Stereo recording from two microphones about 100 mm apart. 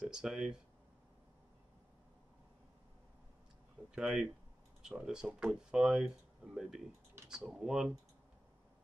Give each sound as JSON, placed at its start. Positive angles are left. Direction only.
{"t": 0.1, "sound": "speech", "side_deg": -5}
{"t": 3.9, "sound": "speech", "side_deg": -5}